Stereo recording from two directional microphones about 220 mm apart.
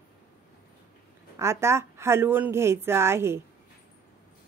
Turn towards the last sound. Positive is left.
turn(degrees=-10)  # may be behind; listen again after turning